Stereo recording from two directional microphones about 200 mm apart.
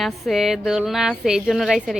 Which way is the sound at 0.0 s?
Centre (ahead or behind).